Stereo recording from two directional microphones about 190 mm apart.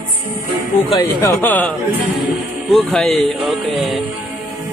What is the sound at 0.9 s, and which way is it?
Speech, 20° left (ahead or behind).